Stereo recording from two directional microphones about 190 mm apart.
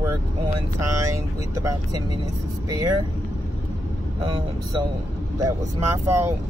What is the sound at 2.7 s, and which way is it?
Speech, 15° right (ahead or behind).